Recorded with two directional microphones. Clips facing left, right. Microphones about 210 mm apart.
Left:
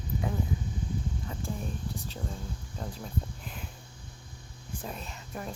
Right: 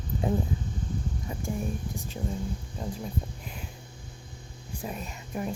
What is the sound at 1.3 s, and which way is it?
Speech, 10° right (ahead or behind).